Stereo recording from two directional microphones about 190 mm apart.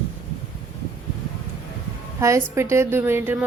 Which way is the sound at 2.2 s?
15° right (ahead or behind).